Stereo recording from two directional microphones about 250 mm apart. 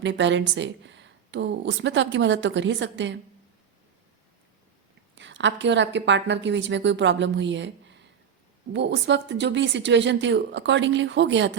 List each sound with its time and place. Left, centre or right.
0.0 s speech: right
5.1 s speech: right